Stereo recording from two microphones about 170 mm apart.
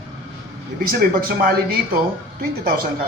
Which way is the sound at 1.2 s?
60° right (ahead or behind).